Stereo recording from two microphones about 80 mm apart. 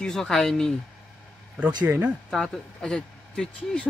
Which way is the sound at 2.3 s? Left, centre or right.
Centre.